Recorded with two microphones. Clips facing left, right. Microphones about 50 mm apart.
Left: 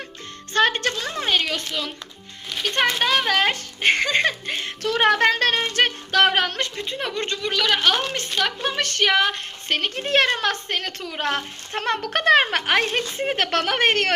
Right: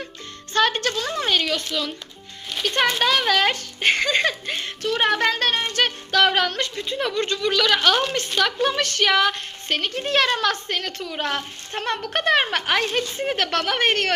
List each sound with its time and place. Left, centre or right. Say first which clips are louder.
0.5 s a woman's voice: left 1 dB; left
2.6 s speech: right 1 dB; left
4.9 s speech: left 3 dB; left
5.8 s a woman's voice: even; left
7.4 s a woman's voice: right 1 dB; centre
9.6 s a woman's voice: even; left
10.9 s speech: left 1 dB; left
11.7 s speech: left 2 dB; left